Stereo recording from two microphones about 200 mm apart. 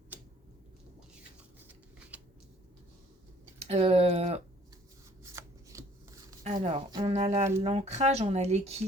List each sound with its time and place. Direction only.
1.6 s shuffling cards: 10° right (ahead or behind)
3.6 s a sound: 30° right (ahead or behind)
5.2 s shuffling cards: 15° right (ahead or behind)
6.5 s speech: 30° right (ahead or behind)